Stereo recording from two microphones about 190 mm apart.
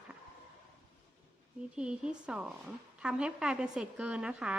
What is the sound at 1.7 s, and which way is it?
A woman's voice, 5° right (ahead or behind).